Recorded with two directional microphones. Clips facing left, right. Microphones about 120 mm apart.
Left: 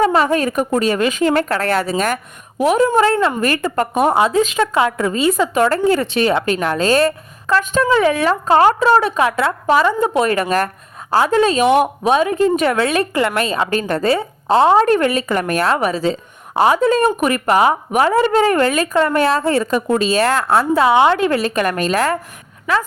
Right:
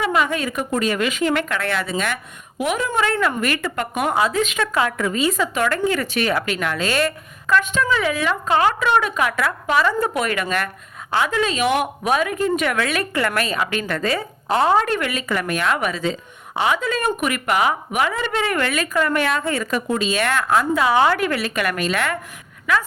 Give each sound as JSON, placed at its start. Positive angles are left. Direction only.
{"t": 0.0, "sound": "a woman's voice", "side_deg": 35}
{"t": 13.7, "sound": "a woman's voice", "side_deg": 40}
{"t": 14.8, "sound": "a woman's voice", "side_deg": 35}